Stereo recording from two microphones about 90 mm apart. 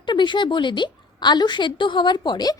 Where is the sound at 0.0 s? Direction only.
60° left (ahead or behind).